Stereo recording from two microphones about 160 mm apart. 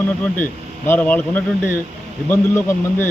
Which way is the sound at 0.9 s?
10° left (ahead or behind).